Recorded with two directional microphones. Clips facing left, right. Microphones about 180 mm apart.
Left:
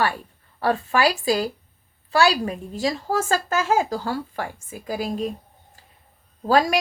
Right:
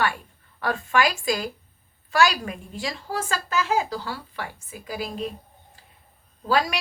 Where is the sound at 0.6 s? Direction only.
35° left (ahead or behind).